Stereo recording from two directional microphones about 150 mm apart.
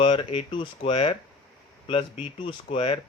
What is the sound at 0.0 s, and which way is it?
Speech, 35° left (ahead or behind).